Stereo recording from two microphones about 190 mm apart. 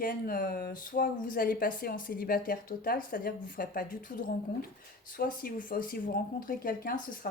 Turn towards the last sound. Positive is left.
turn(degrees=50)  # may be behind; listen again after turning